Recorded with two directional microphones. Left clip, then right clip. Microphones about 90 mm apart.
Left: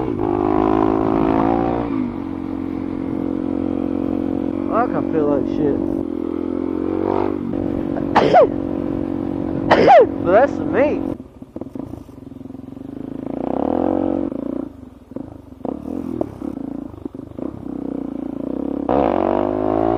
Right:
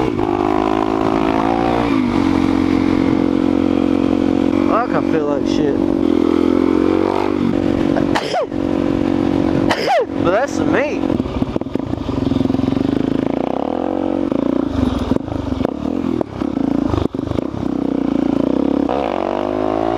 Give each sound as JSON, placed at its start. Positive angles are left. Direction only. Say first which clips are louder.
{"t": 0.3, "sound": "vehicle", "louder": "left 2 dB", "side_deg": -15}
{"t": 18.9, "sound": "vehicle", "louder": "left 2 dB", "side_deg": -15}